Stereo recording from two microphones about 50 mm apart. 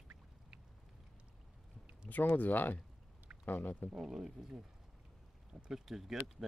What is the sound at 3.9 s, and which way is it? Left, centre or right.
Speech, centre.